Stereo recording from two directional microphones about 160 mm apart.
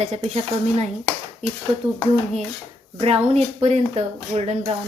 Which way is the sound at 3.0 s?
40° right (ahead or behind).